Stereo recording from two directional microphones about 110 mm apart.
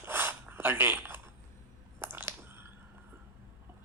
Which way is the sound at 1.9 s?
20° right (ahead or behind).